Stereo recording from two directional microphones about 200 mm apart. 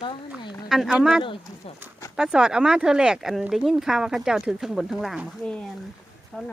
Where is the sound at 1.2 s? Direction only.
25° left (ahead or behind).